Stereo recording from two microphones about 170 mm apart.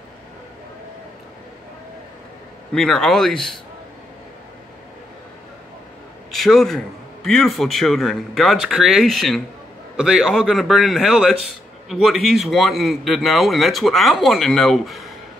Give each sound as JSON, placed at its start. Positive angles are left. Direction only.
{"t": 2.7, "sound": "a man's voice", "side_deg": 5}
{"t": 6.3, "sound": "a man's voice", "side_deg": 0}